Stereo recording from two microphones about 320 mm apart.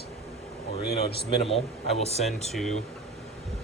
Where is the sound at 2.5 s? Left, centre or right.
Centre.